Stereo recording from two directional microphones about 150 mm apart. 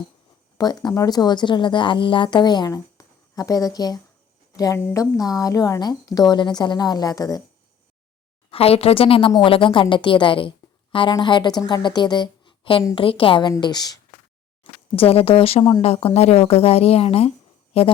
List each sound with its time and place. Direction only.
0.6 s a woman's voice: 25° left (ahead or behind)
8.4 s a woman's voice: 40° left (ahead or behind)
14.6 s a woman's voice: 40° left (ahead or behind)